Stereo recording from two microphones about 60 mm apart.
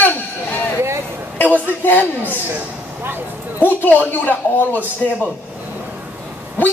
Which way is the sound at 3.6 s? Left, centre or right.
Left.